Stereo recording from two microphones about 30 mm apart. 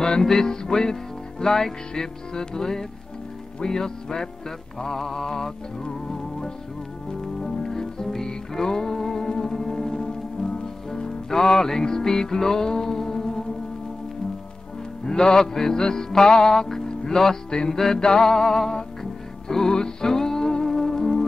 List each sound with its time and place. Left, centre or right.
0.2 s music: centre
7.6 s music: centre
15.0 s music: left